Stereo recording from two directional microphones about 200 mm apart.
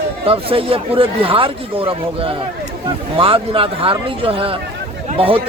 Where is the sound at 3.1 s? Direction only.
25° right (ahead or behind).